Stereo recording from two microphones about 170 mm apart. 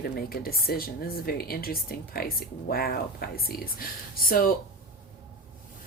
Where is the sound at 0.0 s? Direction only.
60° left (ahead or behind).